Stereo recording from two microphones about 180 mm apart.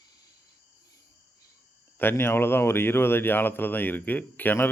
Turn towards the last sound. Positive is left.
turn(degrees=10)  # may be behind; listen again after turning